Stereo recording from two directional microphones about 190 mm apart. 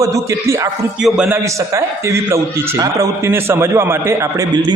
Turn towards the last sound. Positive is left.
turn(degrees=-15)  # may be behind; listen again after turning